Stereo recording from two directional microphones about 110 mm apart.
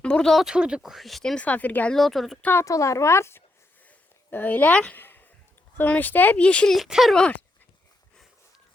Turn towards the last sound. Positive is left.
turn(degrees=10)  # may be behind; listen again after turning